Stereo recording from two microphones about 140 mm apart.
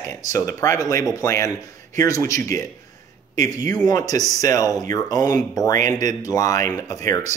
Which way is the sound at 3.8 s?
25° left (ahead or behind).